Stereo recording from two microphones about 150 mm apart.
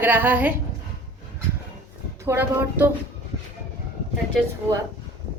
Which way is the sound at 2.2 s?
15° right (ahead or behind).